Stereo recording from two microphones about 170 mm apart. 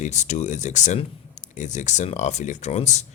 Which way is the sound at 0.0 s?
45° left (ahead or behind).